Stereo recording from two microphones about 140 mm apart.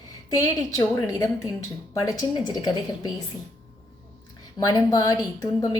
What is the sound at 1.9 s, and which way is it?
A woman's voice, 25° left (ahead or behind).